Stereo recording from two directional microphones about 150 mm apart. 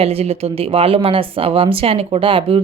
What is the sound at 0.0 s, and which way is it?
Speech, 40° right (ahead or behind).